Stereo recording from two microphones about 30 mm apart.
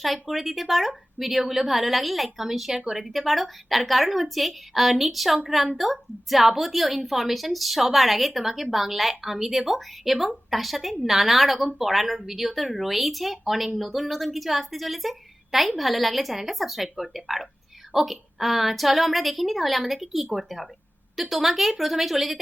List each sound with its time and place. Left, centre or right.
0.0 s a woman's voice: centre
2.7 s speech: centre
3.0 s a woman's voice: centre